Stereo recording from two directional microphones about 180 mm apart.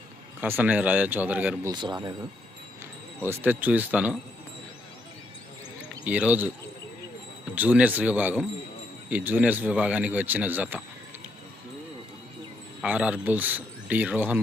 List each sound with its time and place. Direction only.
0.4 s speech: 10° right (ahead or behind)
1.7 s speech: 25° right (ahead or behind)
3.2 s speech: 10° right (ahead or behind)
6.1 s speech: 10° right (ahead or behind)
7.5 s speech: 10° right (ahead or behind)
12.8 s speech: 5° right (ahead or behind)